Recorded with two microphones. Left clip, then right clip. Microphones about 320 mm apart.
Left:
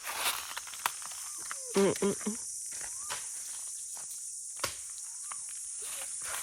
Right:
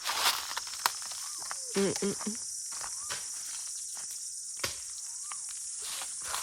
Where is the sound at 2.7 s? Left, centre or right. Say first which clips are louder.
Right 3 dB; right.